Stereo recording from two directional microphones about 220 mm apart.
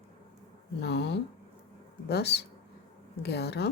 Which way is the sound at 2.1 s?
50° left (ahead or behind).